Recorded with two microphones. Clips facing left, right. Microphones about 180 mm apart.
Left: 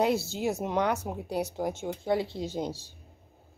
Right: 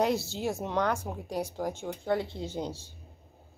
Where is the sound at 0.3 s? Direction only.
15° left (ahead or behind).